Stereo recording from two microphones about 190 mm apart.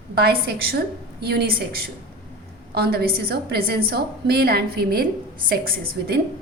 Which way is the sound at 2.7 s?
55° right (ahead or behind).